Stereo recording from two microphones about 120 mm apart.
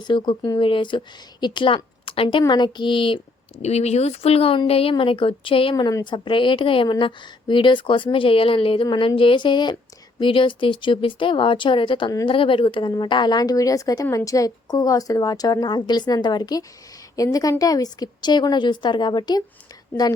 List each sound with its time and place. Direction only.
0.0 s a woman's voice: 40° left (ahead or behind)
3.6 s speech: 65° left (ahead or behind); by 5.7 s 50° left (ahead or behind)
5.7 s a woman's voice: 30° left (ahead or behind)